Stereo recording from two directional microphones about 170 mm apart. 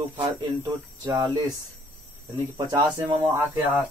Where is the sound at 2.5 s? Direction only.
25° right (ahead or behind).